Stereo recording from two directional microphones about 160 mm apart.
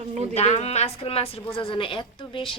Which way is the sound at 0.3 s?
45° left (ahead or behind).